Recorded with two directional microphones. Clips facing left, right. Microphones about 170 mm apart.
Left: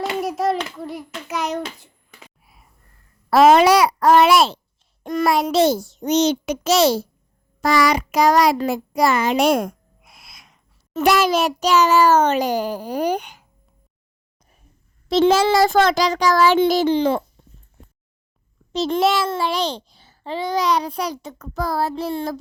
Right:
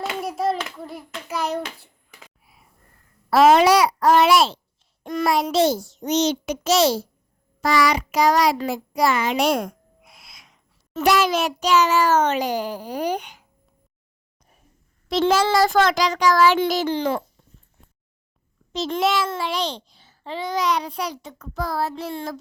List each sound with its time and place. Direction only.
0.0 s child singing: centre (ahead or behind)
3.2 s a child's voice: 50° left (ahead or behind)
7.6 s a child's voice: 45° left (ahead or behind)
15.1 s a child's voice: 25° left (ahead or behind)
18.7 s a child's voice: 35° left (ahead or behind)